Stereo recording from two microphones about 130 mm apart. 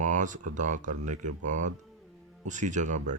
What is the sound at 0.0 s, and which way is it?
Speech, 75° right (ahead or behind).